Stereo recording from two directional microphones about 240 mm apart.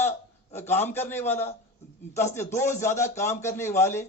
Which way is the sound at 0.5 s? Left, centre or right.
Centre.